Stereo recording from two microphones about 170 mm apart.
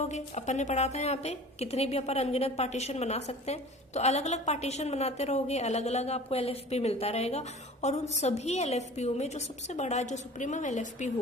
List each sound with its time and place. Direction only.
0.0 s a woman's voice: 45° left (ahead or behind)